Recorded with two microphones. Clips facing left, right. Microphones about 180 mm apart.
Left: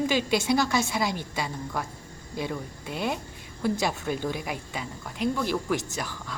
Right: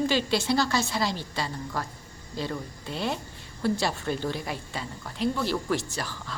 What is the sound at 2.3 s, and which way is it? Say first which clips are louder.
Speech: left 1 dB; 15° left (ahead or behind).